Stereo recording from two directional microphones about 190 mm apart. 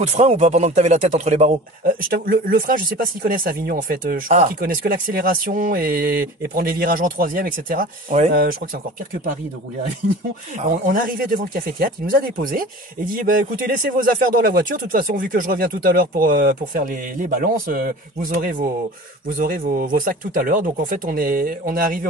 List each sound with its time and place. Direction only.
0.0 s a man's voice: 35° right (ahead or behind)
10.7 s a man's voice: 45° right (ahead or behind)